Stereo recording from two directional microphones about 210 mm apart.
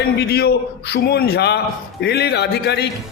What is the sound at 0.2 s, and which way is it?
A man's voice, 50° left (ahead or behind).